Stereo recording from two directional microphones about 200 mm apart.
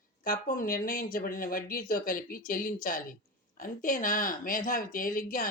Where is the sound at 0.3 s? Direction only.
45° left (ahead or behind).